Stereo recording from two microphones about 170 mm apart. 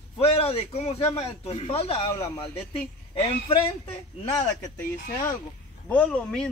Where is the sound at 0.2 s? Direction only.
35° left (ahead or behind).